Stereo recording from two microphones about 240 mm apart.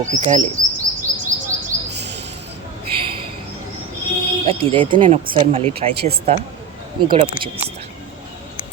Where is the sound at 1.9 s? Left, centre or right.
Right.